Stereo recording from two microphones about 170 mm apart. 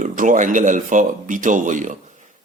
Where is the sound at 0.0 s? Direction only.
50° right (ahead or behind).